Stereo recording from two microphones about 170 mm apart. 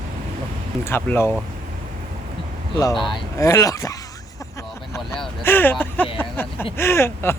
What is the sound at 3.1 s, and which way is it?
Speech, 20° left (ahead or behind).